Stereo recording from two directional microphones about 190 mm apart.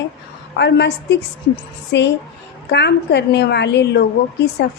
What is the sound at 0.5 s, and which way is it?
Speech, 65° left (ahead or behind).